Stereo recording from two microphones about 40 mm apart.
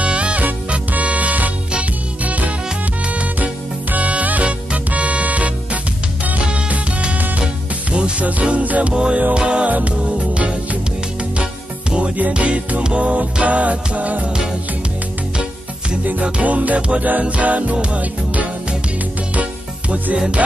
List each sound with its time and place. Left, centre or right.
0.0 s music: right
3.9 s music: right
8.9 s music: right
9.7 s music: right
12.2 s music: right
16.0 s music: right